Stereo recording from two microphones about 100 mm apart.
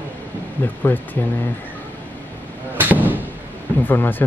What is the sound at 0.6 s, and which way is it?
Speech, 20° left (ahead or behind).